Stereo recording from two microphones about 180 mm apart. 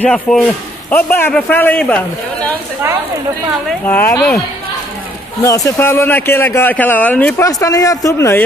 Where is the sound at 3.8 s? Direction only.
10° left (ahead or behind).